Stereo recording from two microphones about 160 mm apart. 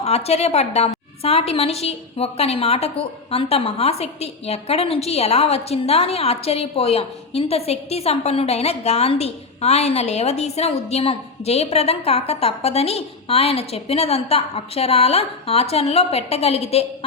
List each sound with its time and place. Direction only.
0.0 s a woman's voice: 40° left (ahead or behind)